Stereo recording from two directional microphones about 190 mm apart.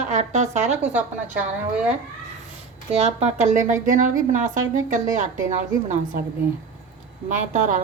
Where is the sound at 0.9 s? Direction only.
10° right (ahead or behind).